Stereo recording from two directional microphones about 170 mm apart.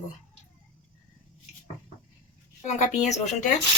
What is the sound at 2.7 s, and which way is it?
Speech, 40° left (ahead or behind).